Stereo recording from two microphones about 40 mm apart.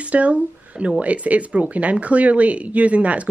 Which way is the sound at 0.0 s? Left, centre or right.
Right.